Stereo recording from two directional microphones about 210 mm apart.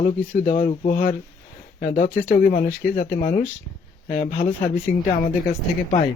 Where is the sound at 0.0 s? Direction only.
40° left (ahead or behind).